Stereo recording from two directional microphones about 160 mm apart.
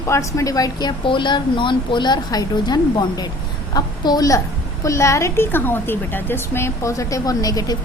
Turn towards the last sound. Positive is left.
turn(degrees=25)  # may be behind; listen again after turning